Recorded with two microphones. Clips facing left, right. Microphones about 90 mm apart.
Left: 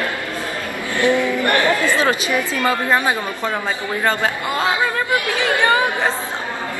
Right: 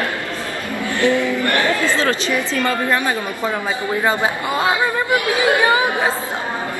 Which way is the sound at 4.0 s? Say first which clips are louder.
Even; 15° right (ahead or behind).